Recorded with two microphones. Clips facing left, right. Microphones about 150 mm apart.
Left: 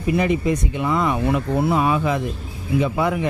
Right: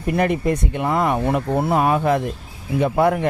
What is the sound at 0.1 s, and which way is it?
Speech, 55° right (ahead or behind).